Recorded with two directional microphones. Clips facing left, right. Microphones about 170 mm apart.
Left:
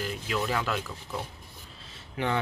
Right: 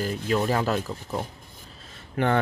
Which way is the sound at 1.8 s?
50° right (ahead or behind).